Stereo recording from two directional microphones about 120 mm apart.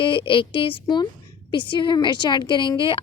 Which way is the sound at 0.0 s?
45° left (ahead or behind).